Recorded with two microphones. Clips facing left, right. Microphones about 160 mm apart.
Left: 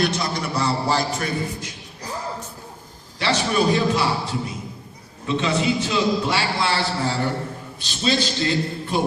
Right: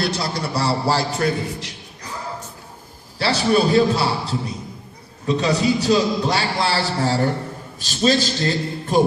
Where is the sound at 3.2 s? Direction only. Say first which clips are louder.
Right 3 dB; 35° right (ahead or behind).